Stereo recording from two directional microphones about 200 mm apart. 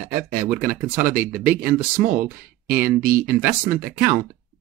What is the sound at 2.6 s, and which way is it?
Speech, 45° right (ahead or behind).